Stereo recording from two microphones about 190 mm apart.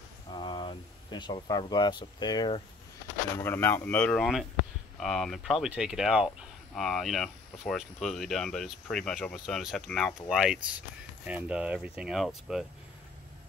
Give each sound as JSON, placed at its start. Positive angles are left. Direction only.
{"t": 0.3, "sound": "speech", "side_deg": 25}
{"t": 3.4, "sound": "speech", "side_deg": 10}